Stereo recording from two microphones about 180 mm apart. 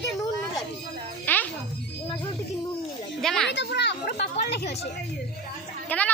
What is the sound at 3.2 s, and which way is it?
Speech, centre (ahead or behind).